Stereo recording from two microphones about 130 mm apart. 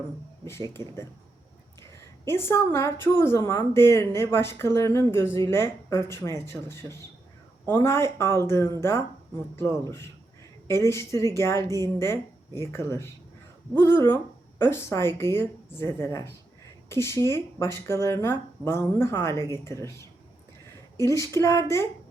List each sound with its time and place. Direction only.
0.8 s a woman's voice: 20° left (ahead or behind)
21.0 s a woman's voice: 25° left (ahead or behind)